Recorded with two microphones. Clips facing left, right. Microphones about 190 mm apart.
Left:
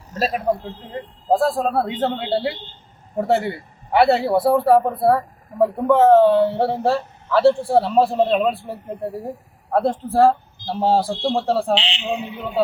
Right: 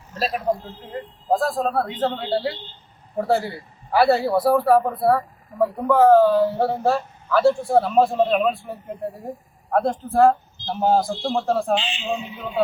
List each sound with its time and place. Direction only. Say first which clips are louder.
0.1 s a man's voice: left 2 dB; 45° left (ahead or behind)
1.3 s a man's voice: left 3 dB; 30° left (ahead or behind)
11.7 s a man's voice: left 1 dB; 70° left (ahead or behind)